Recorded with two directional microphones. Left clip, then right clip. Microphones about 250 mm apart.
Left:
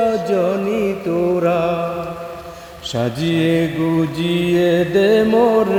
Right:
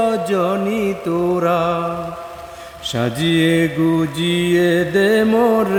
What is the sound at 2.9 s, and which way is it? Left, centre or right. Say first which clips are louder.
Mantra: right 1 dB; right.